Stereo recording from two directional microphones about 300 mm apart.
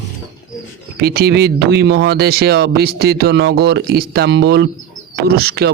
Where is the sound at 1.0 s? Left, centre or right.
Right.